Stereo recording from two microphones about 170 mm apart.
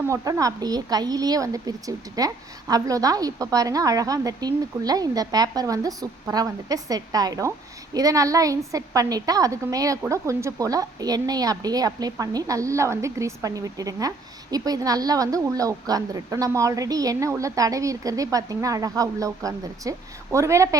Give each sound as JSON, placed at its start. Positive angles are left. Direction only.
{"t": 0.1, "sound": "a woman's voice", "side_deg": -20}